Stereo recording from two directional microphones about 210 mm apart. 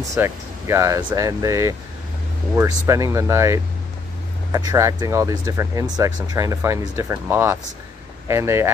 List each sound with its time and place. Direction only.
0.0 s speech: 15° right (ahead or behind)
2.9 s speech: 15° right (ahead or behind)